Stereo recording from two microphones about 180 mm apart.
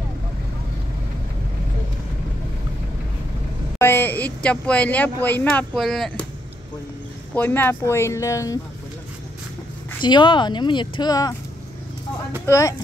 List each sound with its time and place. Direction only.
3.7 s speech: 15° left (ahead or behind)
7.3 s speech: 10° left (ahead or behind)
10.0 s speech: 25° left (ahead or behind)
12.4 s speech: 15° left (ahead or behind)